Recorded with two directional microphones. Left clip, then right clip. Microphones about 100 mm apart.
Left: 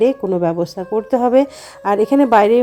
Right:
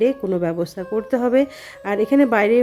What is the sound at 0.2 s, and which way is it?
Speech, 5° left (ahead or behind).